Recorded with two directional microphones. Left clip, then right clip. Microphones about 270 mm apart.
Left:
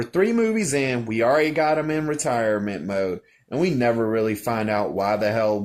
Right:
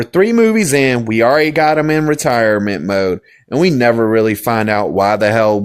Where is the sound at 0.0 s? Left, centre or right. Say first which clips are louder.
Right 9 dB; right.